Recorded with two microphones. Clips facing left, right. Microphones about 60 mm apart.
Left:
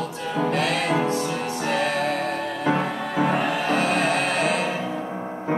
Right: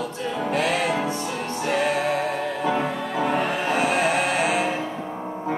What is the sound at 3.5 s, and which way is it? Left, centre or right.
Music, centre.